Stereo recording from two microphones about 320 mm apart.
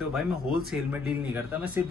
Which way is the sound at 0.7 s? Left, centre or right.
Centre.